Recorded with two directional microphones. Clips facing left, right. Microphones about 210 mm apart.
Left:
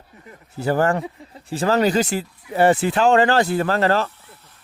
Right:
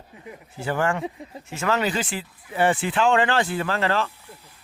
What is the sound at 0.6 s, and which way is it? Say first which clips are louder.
Speech: left 5 dB; 40° left (ahead or behind).